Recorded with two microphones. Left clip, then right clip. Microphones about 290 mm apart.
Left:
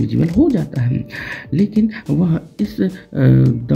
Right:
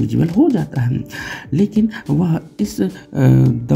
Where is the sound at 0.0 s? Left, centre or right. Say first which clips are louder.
Even; centre.